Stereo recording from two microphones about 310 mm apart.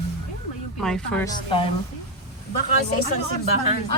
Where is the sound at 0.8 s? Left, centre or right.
Centre.